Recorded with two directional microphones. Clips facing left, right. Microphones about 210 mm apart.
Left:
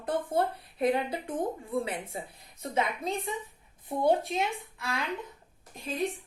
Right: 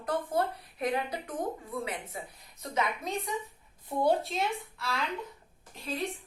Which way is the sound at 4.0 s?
15° left (ahead or behind).